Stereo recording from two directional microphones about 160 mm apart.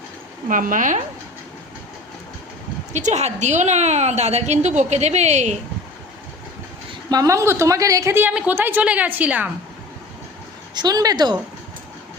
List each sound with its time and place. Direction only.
0.4 s a woman's voice: 55° right (ahead or behind)
2.9 s a woman's voice: 45° right (ahead or behind)
7.1 s a woman's voice: 20° right (ahead or behind)
10.8 s a woman's voice: 25° right (ahead or behind)